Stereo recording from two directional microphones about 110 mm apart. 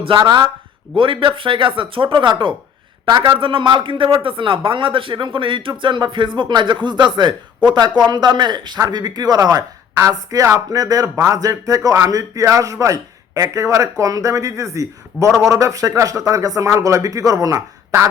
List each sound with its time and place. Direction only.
0.0 s speech: 50° right (ahead or behind); by 17.6 s 30° right (ahead or behind)